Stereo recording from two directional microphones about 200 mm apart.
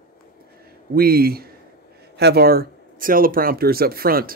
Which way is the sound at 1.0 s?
50° right (ahead or behind).